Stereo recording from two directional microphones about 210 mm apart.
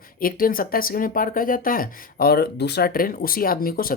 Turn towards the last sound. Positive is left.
turn(degrees=45)  # may be behind; listen again after turning